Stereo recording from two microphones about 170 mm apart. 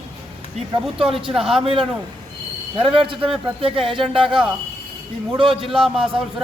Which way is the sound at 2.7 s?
30° right (ahead or behind).